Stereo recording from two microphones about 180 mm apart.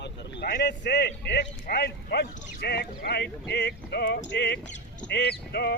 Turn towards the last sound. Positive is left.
turn(degrees=65)  # may be behind; listen again after turning